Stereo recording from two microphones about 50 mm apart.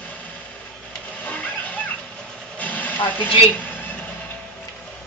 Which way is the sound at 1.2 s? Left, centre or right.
Left.